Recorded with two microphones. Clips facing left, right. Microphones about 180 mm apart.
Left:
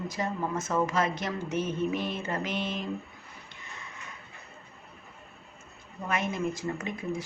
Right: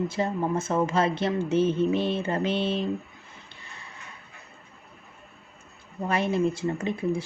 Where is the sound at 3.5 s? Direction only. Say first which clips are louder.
Left 2 dB; 30° right (ahead or behind).